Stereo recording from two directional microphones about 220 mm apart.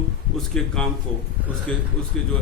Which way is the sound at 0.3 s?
Centre (ahead or behind).